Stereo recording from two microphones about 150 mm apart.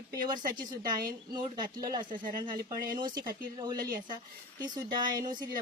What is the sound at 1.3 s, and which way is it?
Speech, 30° right (ahead or behind).